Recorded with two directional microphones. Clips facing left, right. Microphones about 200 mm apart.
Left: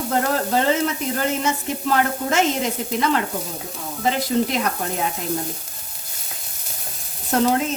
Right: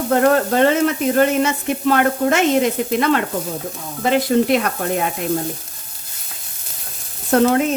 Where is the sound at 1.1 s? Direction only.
60° right (ahead or behind).